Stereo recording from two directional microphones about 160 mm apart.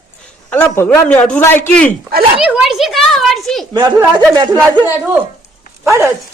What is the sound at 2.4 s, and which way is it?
Whip, centre (ahead or behind).